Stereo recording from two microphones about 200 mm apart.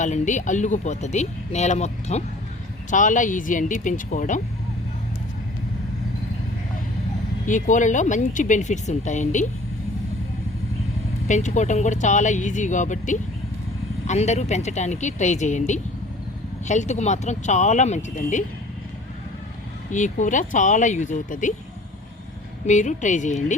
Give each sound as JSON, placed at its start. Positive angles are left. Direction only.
{"t": 0.0, "sound": "speech", "side_deg": 40}
{"t": 7.4, "sound": "speech", "side_deg": 40}
{"t": 11.3, "sound": "speech", "side_deg": 35}
{"t": 19.9, "sound": "speech", "side_deg": 40}
{"t": 22.6, "sound": "speech", "side_deg": 35}